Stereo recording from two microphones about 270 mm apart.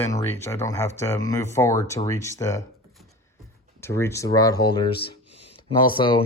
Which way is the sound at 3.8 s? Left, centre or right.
Centre.